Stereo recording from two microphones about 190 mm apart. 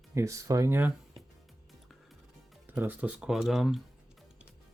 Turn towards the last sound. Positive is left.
turn(degrees=0)  # may be behind; listen again after turning